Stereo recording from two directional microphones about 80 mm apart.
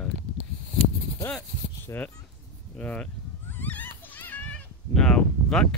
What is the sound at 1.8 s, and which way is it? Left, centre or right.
Speech, left.